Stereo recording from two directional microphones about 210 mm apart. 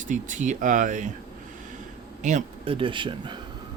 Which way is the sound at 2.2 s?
30° right (ahead or behind).